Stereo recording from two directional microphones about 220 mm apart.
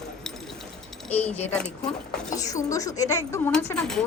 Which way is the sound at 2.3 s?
15° left (ahead or behind).